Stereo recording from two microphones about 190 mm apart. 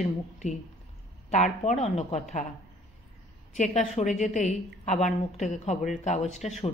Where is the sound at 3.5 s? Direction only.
40° left (ahead or behind).